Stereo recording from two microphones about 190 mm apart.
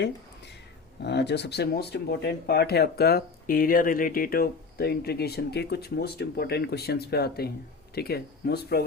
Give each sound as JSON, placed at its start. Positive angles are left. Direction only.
{"t": 1.0, "sound": "speech", "side_deg": 60}